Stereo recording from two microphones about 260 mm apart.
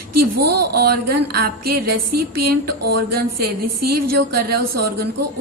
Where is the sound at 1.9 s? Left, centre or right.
Right.